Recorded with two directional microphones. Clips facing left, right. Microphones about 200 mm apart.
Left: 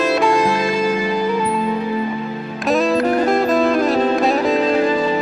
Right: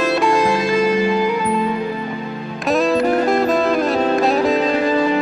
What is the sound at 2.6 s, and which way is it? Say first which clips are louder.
Music: even; centre (ahead or behind).